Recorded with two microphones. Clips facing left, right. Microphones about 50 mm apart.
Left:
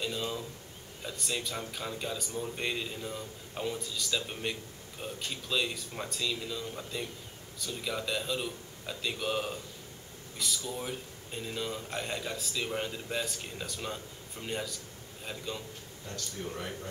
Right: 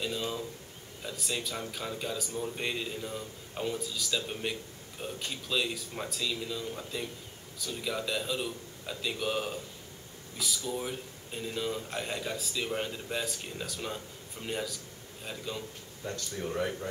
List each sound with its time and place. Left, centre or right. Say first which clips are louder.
0.0 s speech: right 1 dB; centre